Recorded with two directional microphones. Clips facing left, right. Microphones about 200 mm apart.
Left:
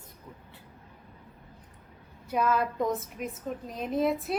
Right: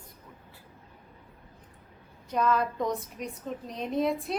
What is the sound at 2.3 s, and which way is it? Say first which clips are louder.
A woman's voice: even; 5° left (ahead or behind).